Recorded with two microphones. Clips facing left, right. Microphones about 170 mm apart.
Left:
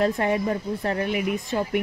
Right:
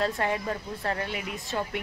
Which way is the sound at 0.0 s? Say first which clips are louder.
Left 6 dB; 20° left (ahead or behind).